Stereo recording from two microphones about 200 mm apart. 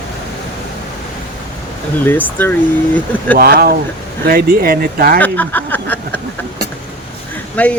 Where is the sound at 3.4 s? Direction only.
50° right (ahead or behind).